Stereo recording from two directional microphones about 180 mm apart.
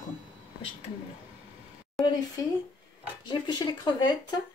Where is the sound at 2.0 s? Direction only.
20° left (ahead or behind).